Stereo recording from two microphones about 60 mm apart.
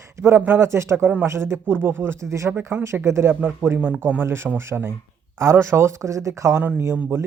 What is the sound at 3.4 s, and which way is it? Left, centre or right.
Speech, right.